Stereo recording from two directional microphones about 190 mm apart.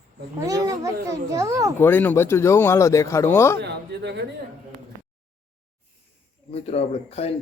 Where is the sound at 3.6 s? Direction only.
60° right (ahead or behind).